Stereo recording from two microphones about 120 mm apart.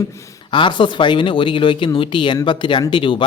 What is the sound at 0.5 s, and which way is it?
Speech, 40° left (ahead or behind).